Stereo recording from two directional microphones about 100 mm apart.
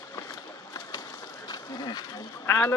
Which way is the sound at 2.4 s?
25° left (ahead or behind).